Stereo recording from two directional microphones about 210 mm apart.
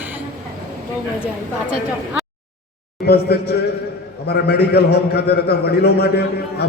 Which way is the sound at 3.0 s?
50° left (ahead or behind).